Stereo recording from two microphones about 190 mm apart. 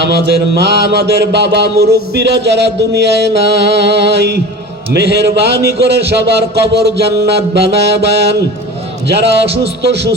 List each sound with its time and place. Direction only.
0.0 s music: 65° right (ahead or behind)